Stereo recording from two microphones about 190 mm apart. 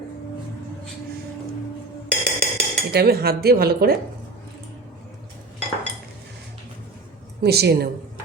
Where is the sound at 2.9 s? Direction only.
55° right (ahead or behind).